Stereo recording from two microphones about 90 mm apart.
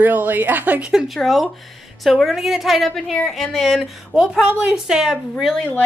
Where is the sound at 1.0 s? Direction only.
Centre (ahead or behind).